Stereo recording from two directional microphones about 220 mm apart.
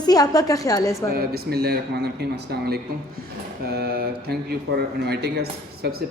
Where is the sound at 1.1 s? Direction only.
45° right (ahead or behind).